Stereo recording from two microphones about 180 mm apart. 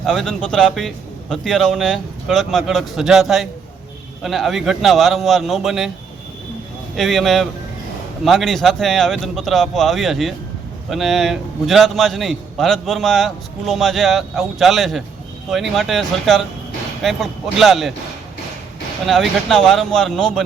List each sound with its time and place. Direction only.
0.0 s a man's voice: centre (ahead or behind)
6.9 s a man's voice: centre (ahead or behind)
19.0 s a man's voice: centre (ahead or behind)